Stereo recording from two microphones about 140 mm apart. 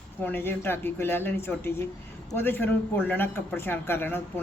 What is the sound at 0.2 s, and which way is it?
Speech, 15° left (ahead or behind).